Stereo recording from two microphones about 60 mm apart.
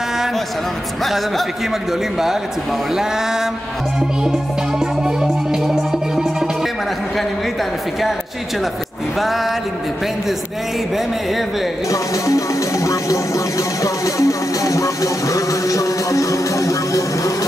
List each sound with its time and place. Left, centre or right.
2.9 s music: centre
9.2 s music: centre
11.9 s music: left